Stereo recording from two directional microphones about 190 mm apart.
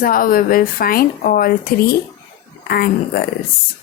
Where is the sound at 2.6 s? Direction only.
50° left (ahead or behind).